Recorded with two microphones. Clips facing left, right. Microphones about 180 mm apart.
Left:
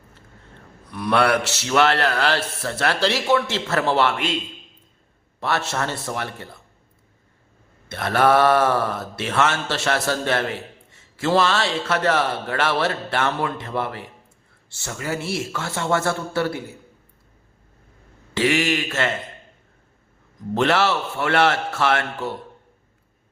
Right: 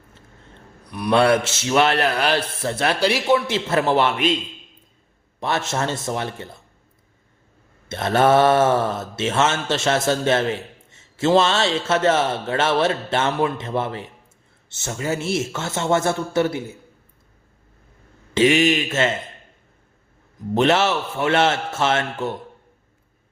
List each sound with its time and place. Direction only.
0.9 s a man's voice: 15° right (ahead or behind)
5.4 s a man's voice: 20° right (ahead or behind)
7.9 s a man's voice: 25° right (ahead or behind)
18.3 s a man's voice: 20° right (ahead or behind)
20.5 s a man's voice: 20° right (ahead or behind)